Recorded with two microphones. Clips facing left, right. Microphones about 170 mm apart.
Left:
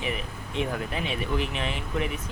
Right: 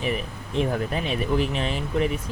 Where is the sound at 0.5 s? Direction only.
40° right (ahead or behind).